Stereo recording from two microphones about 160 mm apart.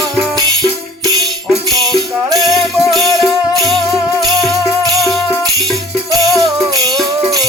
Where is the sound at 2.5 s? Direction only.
Centre (ahead or behind).